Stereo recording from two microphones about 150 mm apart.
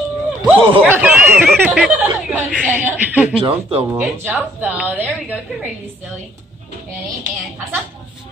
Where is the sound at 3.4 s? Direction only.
40° right (ahead or behind).